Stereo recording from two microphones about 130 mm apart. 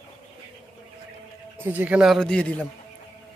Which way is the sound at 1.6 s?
15° right (ahead or behind).